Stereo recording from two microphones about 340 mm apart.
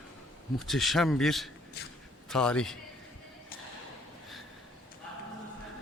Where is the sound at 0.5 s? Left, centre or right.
Centre.